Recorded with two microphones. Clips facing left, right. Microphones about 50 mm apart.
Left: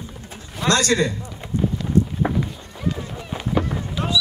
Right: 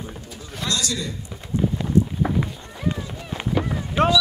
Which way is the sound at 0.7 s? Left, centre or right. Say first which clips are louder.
Left 8 dB; left.